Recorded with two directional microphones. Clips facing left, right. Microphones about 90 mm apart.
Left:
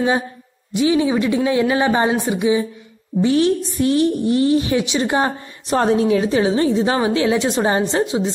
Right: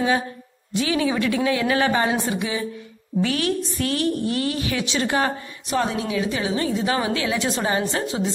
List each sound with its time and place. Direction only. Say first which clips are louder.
0.7 s a woman's voice: left 5 dB; 25° left (ahead or behind)
5.7 s a woman's voice: left 8 dB; 40° left (ahead or behind); by 8.3 s 20° left (ahead or behind)